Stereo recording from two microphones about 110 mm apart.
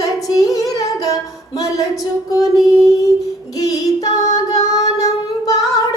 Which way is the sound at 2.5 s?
Centre (ahead or behind).